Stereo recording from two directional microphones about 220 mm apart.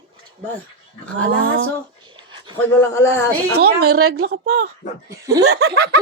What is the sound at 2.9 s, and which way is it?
Speech, 10° left (ahead or behind).